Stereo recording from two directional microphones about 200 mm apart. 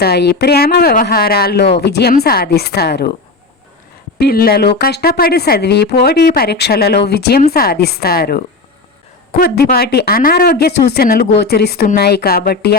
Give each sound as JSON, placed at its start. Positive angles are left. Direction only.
{"t": 0.0, "sound": "speech", "side_deg": 55}
{"t": 4.2, "sound": "speech", "side_deg": 50}
{"t": 9.4, "sound": "speech", "side_deg": 50}